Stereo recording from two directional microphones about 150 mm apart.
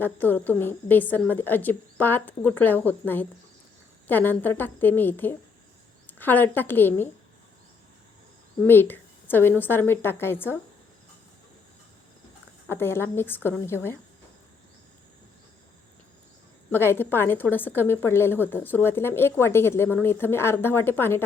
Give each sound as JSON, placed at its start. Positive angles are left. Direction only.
{"t": 0.0, "sound": "a woman's voice", "side_deg": 10}
{"t": 8.6, "sound": "a woman's voice", "side_deg": 15}
{"t": 12.6, "sound": "a woman's voice", "side_deg": 15}
{"t": 16.7, "sound": "a woman's voice", "side_deg": 15}